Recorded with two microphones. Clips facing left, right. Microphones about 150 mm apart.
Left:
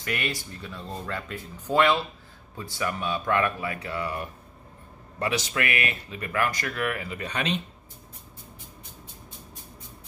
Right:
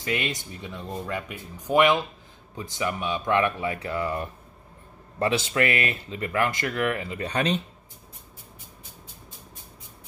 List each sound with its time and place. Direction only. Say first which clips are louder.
0.0 s speech: right 2 dB; 20° right (ahead or behind); by 7.6 s 35° right (ahead or behind)